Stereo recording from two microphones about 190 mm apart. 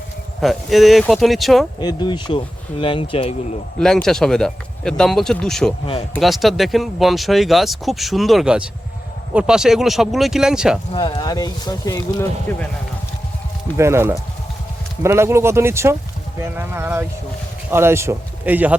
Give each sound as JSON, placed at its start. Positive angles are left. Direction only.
{"t": 0.4, "sound": "speech", "side_deg": 0}
{"t": 1.8, "sound": "speech", "side_deg": 20}
{"t": 3.8, "sound": "speech", "side_deg": 5}
{"t": 5.8, "sound": "speech", "side_deg": 30}
{"t": 6.1, "sound": "speech", "side_deg": 0}
{"t": 10.9, "sound": "speech", "side_deg": 25}
{"t": 12.5, "sound": "speech", "side_deg": 10}
{"t": 13.7, "sound": "a man's voice", "side_deg": -15}